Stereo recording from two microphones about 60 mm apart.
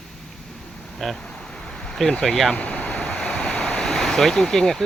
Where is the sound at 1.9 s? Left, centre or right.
Centre.